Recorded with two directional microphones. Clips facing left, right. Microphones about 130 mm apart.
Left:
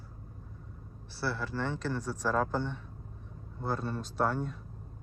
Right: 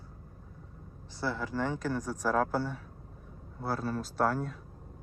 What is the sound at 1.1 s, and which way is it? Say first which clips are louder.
Speech: right 1 dB; 15° right (ahead or behind).